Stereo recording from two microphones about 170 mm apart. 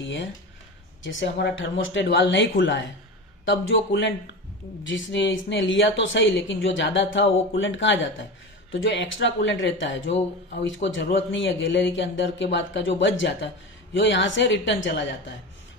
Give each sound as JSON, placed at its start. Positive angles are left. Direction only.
{"t": 0.0, "sound": "speech", "side_deg": 90}